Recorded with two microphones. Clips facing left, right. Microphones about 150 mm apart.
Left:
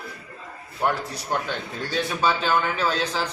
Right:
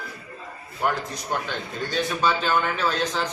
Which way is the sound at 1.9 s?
5° left (ahead or behind).